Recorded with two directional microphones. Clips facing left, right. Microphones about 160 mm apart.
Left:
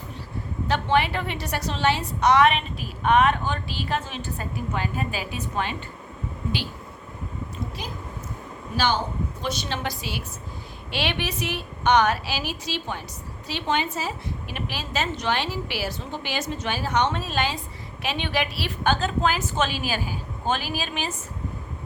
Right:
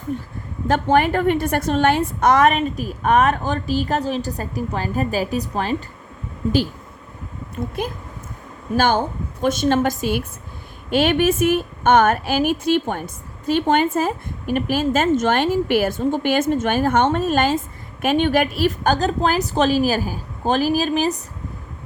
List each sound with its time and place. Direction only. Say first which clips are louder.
0.1 s a woman's voice: right 4 dB; 50° right (ahead or behind)
7.8 s a woman's voice: right 8 dB; 55° right (ahead or behind)